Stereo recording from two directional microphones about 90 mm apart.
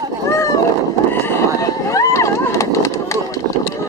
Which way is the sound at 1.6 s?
35° left (ahead or behind).